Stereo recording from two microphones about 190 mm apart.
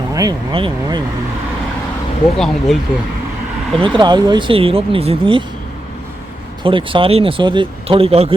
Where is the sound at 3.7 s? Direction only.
25° right (ahead or behind).